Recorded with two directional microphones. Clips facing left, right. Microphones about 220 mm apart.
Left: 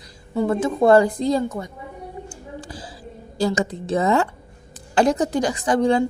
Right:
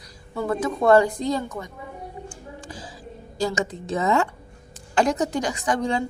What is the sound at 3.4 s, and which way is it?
A woman's voice, 35° left (ahead or behind).